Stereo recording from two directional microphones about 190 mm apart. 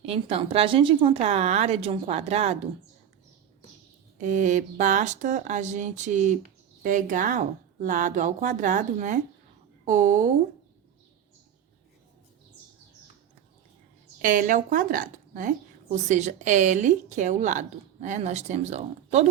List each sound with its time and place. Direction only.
0.0 s a woman's voice: 30° right (ahead or behind)
4.2 s a woman's voice: 40° right (ahead or behind)
14.2 s a woman's voice: 45° right (ahead or behind)